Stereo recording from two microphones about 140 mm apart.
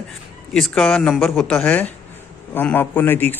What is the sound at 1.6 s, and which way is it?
Speech, 10° left (ahead or behind).